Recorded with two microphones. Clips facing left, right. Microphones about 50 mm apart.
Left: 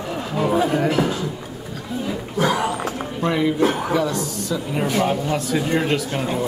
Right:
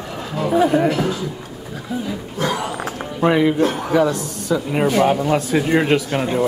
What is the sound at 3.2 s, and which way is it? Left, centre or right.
Speech, right.